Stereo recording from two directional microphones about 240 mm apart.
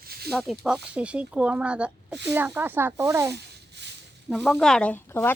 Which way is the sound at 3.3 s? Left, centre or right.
Right.